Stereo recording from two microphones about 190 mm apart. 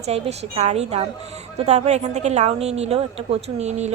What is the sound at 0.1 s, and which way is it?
Speech, 35° right (ahead or behind).